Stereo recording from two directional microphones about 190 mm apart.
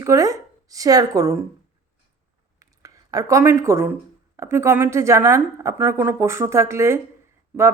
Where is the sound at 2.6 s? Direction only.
15° right (ahead or behind).